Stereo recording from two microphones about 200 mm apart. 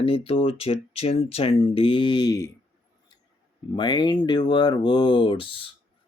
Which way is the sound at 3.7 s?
20° left (ahead or behind).